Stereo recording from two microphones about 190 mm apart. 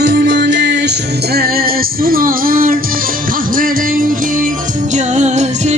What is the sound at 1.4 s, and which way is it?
Music, 50° right (ahead or behind).